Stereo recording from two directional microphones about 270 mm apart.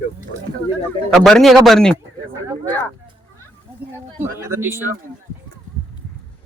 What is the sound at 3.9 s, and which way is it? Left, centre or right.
Speech, centre.